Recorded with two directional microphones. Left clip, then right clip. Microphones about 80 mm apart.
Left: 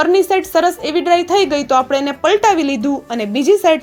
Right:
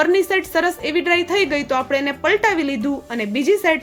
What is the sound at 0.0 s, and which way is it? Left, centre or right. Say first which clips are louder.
Speech: left 4 dB; left.